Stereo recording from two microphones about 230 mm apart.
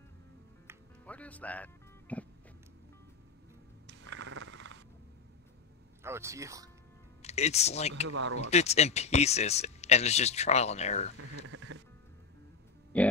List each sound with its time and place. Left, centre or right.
1.0 s speech: centre
3.8 s a sound: right
6.0 s speech: centre
7.2 s speech: left
11.1 s a sound: right
11.5 s music: right
12.9 s speech: centre